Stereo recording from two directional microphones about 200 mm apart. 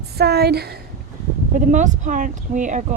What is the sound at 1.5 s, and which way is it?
A woman's voice, 40° right (ahead or behind).